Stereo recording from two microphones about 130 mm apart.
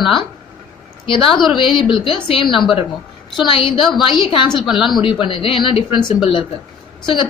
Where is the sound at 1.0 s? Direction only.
40° left (ahead or behind).